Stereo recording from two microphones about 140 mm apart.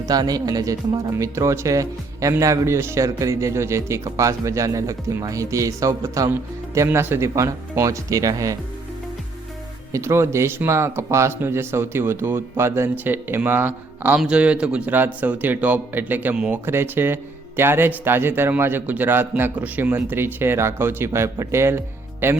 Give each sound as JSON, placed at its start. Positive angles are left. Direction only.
{"t": 0.0, "sound": "speech", "side_deg": -30}
{"t": 9.9, "sound": "a man's voice", "side_deg": -20}